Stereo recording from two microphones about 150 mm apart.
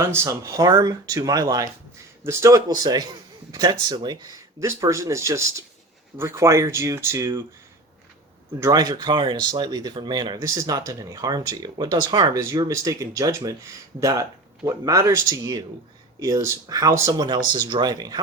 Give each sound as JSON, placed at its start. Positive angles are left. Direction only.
{"t": 0.0, "sound": "speech", "side_deg": -20}
{"t": 8.6, "sound": "speech", "side_deg": -25}